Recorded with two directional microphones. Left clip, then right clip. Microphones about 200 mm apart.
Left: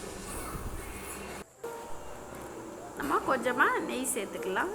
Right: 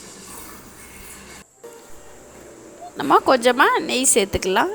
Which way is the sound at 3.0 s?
55° right (ahead or behind).